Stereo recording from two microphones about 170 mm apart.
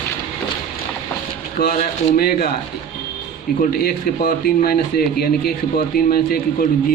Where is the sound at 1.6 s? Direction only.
55° left (ahead or behind).